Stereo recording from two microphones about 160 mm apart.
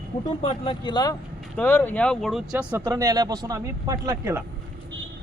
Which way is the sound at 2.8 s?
20° right (ahead or behind).